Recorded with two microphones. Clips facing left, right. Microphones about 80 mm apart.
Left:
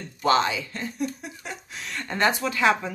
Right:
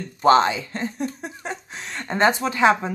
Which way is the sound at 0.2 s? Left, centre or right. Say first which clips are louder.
Right 6 dB; right.